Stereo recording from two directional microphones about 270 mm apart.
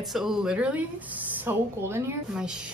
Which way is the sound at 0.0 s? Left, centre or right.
Centre.